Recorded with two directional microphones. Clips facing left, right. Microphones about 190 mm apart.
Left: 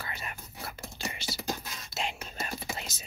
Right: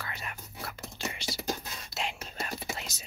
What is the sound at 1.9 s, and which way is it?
Whispering, centre (ahead or behind).